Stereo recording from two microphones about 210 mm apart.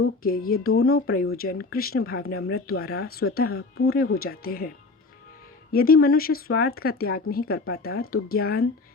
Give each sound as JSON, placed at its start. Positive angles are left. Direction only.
{"t": 0.2, "sound": "speech", "side_deg": 45}
{"t": 0.7, "sound": "speech", "side_deg": 80}
{"t": 0.9, "sound": "speech", "side_deg": 45}
{"t": 5.7, "sound": "speech", "side_deg": 45}